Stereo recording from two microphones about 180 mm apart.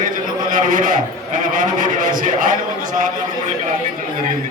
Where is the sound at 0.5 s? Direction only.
50° right (ahead or behind).